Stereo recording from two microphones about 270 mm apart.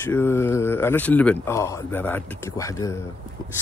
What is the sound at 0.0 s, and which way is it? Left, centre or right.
Speech, centre.